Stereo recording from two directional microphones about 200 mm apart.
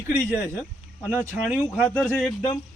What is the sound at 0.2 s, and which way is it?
Speech, 10° left (ahead or behind).